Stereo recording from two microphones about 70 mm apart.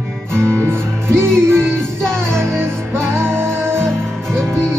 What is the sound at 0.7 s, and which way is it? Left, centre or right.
Music, right.